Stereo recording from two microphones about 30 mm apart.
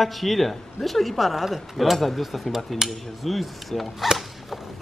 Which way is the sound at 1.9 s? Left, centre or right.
Centre.